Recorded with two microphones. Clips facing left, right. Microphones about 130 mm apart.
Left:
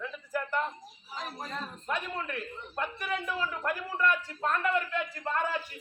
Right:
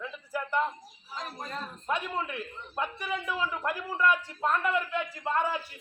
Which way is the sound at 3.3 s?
10° right (ahead or behind).